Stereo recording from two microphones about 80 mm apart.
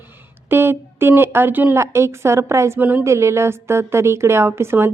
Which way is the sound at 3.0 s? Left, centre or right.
Right.